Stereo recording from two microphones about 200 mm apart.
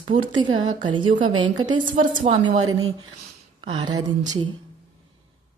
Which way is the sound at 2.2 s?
30° right (ahead or behind).